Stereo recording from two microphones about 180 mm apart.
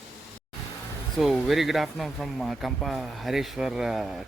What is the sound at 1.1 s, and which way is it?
Speech, centre (ahead or behind).